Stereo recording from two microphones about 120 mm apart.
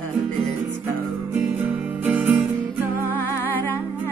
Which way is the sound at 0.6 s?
20° right (ahead or behind).